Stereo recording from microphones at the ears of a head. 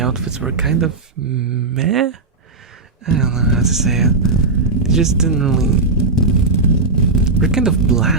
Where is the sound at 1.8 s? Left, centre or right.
Right.